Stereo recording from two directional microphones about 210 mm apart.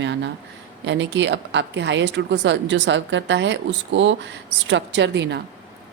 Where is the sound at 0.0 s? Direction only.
55° right (ahead or behind).